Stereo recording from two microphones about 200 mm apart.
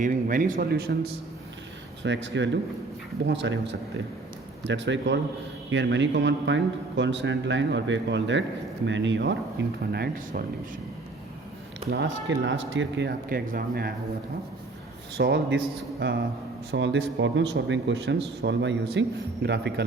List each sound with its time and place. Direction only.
0.0 s speech: 40° right (ahead or behind)
2.0 s speech: 65° right (ahead or behind)
11.9 s speech: 65° right (ahead or behind); by 13.9 s 45° right (ahead or behind)
15.2 s speech: 65° right (ahead or behind)